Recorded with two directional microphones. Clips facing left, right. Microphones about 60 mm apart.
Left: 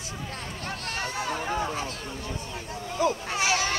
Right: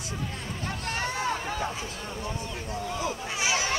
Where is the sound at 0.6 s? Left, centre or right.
Right.